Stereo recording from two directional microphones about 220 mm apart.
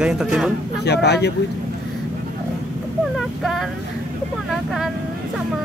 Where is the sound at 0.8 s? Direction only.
50° left (ahead or behind).